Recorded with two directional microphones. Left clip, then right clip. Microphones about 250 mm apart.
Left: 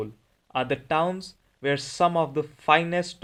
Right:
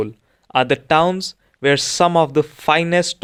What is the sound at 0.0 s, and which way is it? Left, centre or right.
Speech, right.